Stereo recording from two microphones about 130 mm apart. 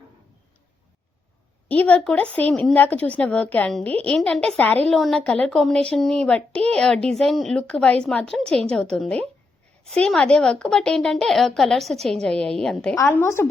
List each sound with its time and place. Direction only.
1.6 s a woman's voice: 10° left (ahead or behind)
13.0 s a woman's voice: 20° left (ahead or behind)